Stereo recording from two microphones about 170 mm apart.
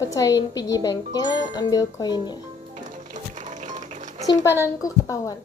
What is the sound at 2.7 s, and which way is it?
Music, 45° right (ahead or behind).